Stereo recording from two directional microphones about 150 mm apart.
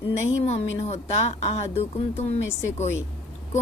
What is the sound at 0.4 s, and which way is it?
Speech, 40° left (ahead or behind).